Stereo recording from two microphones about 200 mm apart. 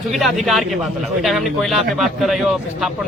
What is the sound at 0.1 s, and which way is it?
A man's voice, centre (ahead or behind).